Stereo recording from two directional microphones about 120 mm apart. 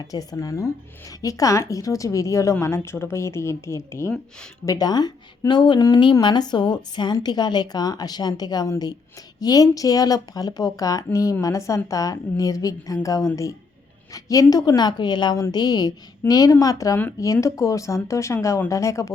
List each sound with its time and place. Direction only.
0.0 s a woman's voice: 30° left (ahead or behind)